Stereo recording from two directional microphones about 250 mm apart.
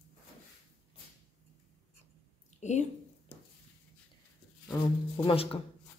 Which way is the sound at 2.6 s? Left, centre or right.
Left.